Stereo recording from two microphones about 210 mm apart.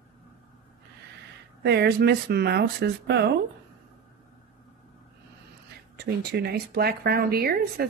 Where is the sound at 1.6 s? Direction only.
50° right (ahead or behind).